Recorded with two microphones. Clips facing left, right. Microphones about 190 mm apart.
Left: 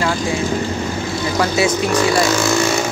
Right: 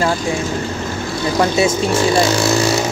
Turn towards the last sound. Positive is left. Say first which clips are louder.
# right 1 dB
turn(degrees=-25)  # may be behind; listen again after turning